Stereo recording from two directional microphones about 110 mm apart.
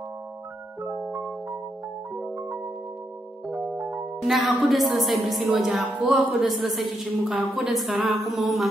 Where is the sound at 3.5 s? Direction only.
10° right (ahead or behind).